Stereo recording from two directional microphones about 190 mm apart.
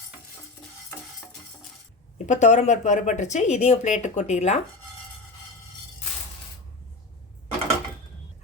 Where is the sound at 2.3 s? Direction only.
40° left (ahead or behind).